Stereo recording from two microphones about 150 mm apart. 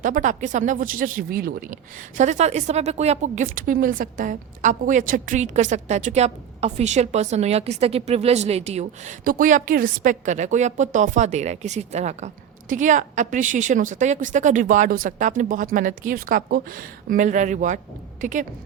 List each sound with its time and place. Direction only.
0.0 s a woman's voice: 60° right (ahead or behind)